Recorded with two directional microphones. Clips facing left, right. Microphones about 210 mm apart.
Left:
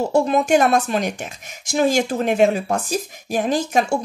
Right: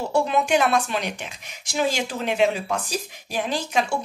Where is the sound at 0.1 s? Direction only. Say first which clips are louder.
Left 3 dB; 45° left (ahead or behind).